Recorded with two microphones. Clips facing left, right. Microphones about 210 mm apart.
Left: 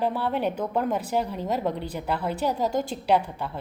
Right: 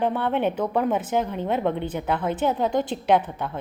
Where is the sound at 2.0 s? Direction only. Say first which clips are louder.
Right 3 dB; 55° right (ahead or behind).